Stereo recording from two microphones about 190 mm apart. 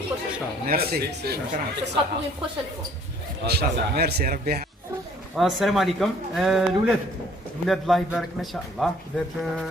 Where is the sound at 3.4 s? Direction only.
55° right (ahead or behind).